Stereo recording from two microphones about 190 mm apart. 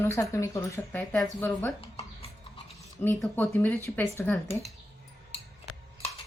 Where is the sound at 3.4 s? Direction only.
10° left (ahead or behind).